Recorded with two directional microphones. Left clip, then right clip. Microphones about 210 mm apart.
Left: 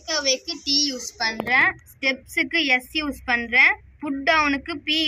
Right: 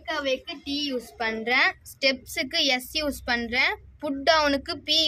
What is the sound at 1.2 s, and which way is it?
A woman's voice, 55° right (ahead or behind).